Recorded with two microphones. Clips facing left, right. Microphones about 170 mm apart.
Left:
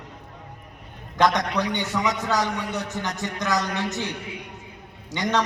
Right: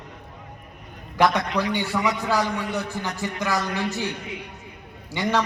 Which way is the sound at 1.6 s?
20° left (ahead or behind).